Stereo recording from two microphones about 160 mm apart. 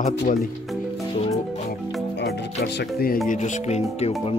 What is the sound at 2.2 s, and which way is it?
Music, 90° left.